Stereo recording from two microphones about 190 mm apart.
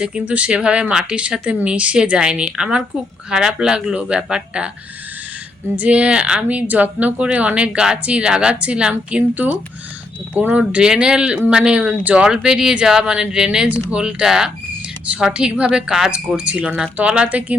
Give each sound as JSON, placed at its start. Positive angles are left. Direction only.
{"t": 0.0, "sound": "speech", "side_deg": -5}
{"t": 5.7, "sound": "a woman's voice", "side_deg": -5}